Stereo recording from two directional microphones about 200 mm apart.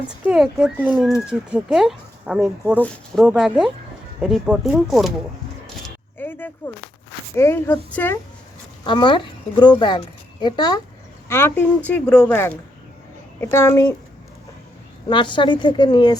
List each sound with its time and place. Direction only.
0.3 s speech: 5° right (ahead or behind)
6.1 s a sound: 10° left (ahead or behind)
7.3 s speech: 10° left (ahead or behind)
8.8 s a woman's voice: 25° left (ahead or behind)
15.1 s a woman's voice: 25° left (ahead or behind)